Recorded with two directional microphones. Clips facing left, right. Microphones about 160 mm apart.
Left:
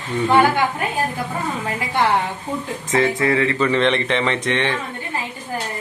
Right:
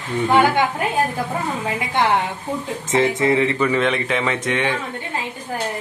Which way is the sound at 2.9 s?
20° right (ahead or behind).